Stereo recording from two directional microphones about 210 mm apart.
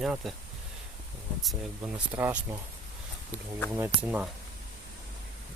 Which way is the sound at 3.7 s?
10° right (ahead or behind).